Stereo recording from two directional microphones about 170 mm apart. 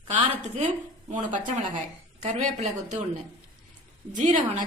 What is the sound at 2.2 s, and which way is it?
Speech, 45° right (ahead or behind).